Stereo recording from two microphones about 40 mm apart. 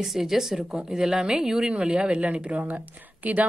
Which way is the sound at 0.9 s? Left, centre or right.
Centre.